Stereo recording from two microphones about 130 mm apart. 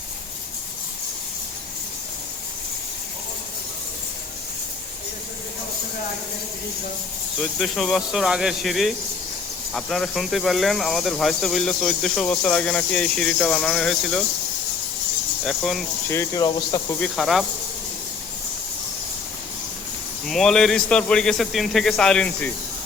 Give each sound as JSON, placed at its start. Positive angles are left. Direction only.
{"t": 7.3, "sound": "speech", "side_deg": 0}
{"t": 15.4, "sound": "speech", "side_deg": 5}
{"t": 16.0, "sound": "speech", "side_deg": 25}
{"t": 17.0, "sound": "speech", "side_deg": 0}
{"t": 20.2, "sound": "speech", "side_deg": 5}